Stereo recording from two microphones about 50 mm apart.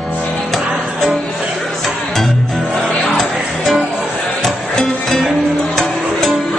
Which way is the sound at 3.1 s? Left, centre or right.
Centre.